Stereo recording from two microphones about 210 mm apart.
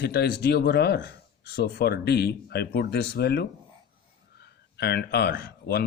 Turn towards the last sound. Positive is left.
turn(degrees=50)  # may be behind; listen again after turning